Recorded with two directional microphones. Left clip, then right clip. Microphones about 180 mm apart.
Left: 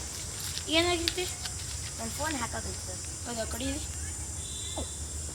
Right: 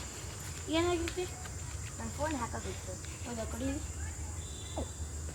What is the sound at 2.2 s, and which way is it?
Speech, 15° left (ahead or behind).